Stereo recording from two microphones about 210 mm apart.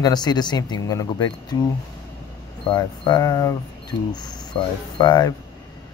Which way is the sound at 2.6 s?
20° left (ahead or behind).